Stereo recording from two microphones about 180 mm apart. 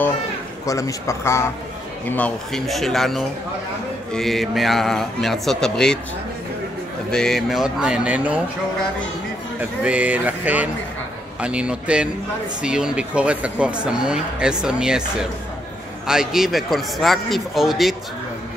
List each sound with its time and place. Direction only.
0.7 s a man's voice: 20° left (ahead or behind)
7.1 s speech: 5° left (ahead or behind)
9.6 s a man's voice: 10° right (ahead or behind)
16.1 s speech: 5° right (ahead or behind)